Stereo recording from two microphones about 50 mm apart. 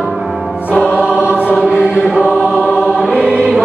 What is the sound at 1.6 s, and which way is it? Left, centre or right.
Choir, centre.